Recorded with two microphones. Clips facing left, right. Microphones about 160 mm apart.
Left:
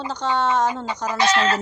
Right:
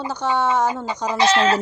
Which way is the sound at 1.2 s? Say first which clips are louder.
Right 3 dB; 25° right (ahead or behind).